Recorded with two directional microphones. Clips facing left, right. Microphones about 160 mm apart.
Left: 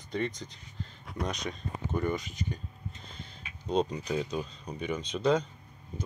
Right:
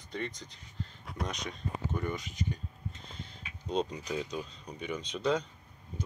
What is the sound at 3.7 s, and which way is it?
Speech, 40° left (ahead or behind).